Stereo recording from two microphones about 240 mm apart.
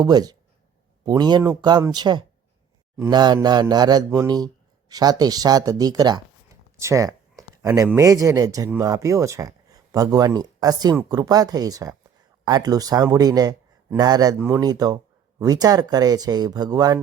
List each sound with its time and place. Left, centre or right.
0.0 s speech: centre
6.5 s a sound: centre
7.5 s speech: centre